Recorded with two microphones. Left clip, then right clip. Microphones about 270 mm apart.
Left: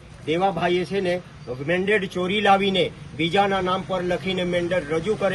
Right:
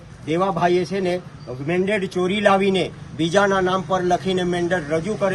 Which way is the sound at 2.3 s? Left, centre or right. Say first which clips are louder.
Even; right.